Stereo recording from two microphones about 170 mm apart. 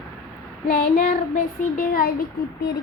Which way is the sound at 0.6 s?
55° left (ahead or behind).